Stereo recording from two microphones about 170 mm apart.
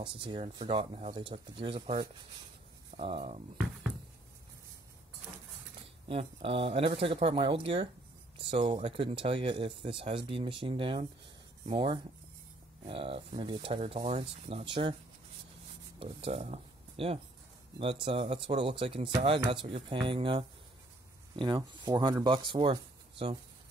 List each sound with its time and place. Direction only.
0.0 s speech: 30° right (ahead or behind)
6.0 s speech: 30° right (ahead or behind)
16.0 s speech: 35° right (ahead or behind)